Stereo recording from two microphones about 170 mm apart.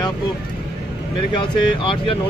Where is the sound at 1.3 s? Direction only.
30° left (ahead or behind).